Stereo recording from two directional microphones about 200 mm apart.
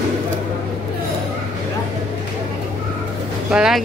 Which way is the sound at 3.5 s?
5° right (ahead or behind).